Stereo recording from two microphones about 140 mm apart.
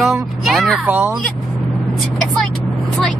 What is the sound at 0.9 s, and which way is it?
Speech, 15° right (ahead or behind).